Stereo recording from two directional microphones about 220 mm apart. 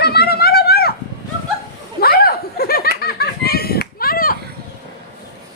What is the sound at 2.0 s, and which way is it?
Snicker, 45° left (ahead or behind).